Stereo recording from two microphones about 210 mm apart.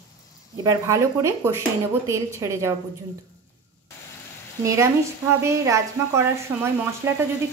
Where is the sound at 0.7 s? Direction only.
15° right (ahead or behind).